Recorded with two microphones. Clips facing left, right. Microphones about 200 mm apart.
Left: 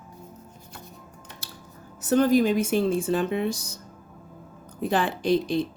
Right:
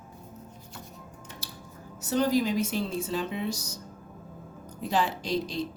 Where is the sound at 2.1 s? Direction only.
55° left (ahead or behind).